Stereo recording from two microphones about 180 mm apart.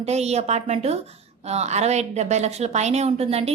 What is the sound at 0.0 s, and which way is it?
A woman's voice, 35° right (ahead or behind).